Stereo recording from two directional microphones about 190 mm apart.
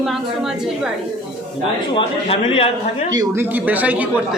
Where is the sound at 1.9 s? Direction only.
30° left (ahead or behind).